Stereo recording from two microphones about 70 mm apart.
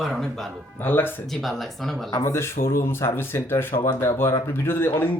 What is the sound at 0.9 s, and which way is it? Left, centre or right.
Speech, left.